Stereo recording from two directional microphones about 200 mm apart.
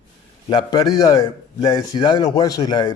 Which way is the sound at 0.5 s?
20° left (ahead or behind).